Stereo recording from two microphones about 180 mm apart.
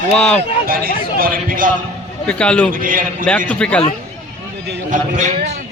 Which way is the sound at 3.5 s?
5° left (ahead or behind).